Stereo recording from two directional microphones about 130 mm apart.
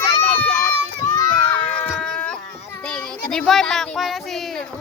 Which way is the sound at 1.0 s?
20° left (ahead or behind).